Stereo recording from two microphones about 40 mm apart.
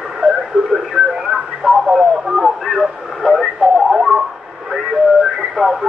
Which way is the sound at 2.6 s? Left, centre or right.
Centre.